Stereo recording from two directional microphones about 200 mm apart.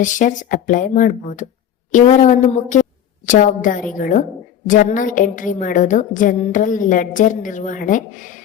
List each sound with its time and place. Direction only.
0.0 s a woman's voice: 40° left (ahead or behind)